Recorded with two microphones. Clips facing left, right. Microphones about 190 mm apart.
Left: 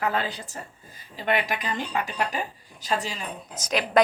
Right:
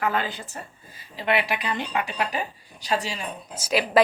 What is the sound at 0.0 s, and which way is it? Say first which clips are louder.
Speech: right 1 dB; 35° left (ahead or behind).